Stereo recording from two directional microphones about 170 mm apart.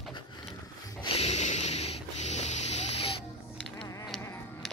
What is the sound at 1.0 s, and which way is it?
Snort, 40° left (ahead or behind).